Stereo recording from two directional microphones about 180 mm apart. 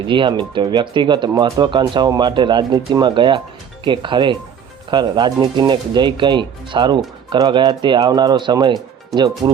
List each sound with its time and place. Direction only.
0.1 s speech: 25° right (ahead or behind)